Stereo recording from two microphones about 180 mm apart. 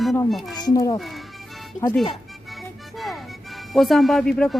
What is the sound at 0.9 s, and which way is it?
Speech, centre (ahead or behind).